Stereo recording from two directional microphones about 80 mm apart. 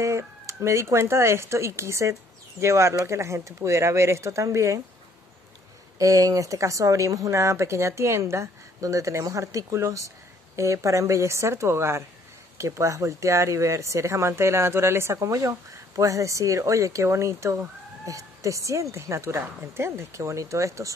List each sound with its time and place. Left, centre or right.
0.0 s speech: right
5.9 s speech: right